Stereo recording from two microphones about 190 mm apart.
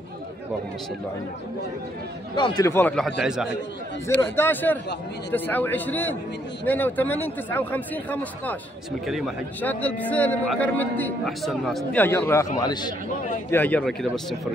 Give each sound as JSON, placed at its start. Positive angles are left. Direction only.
{"t": 2.6, "sound": "speech", "side_deg": 10}
{"t": 4.2, "sound": "a man's voice", "side_deg": 10}
{"t": 13.5, "sound": "a man's voice", "side_deg": 10}